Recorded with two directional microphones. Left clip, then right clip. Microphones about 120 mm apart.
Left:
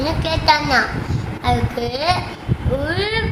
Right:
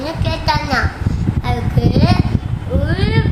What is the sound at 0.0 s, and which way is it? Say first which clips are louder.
A child's voice: left 2 dB; 15° left (ahead or behind).